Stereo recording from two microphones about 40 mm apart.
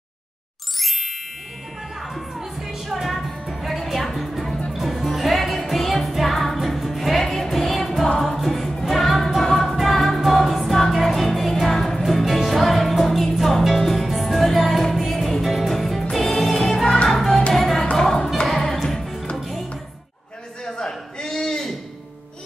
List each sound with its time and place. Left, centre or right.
0.7 s ding: centre
2.0 s music: centre
20.6 s a sound: centre